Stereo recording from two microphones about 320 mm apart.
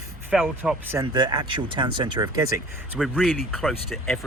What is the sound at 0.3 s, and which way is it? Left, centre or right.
Speech, centre.